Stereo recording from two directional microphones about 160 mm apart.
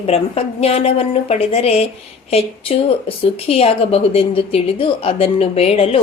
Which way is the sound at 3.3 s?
40° left (ahead or behind).